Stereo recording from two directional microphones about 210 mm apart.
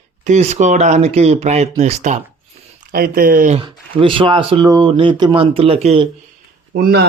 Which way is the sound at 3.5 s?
25° right (ahead or behind).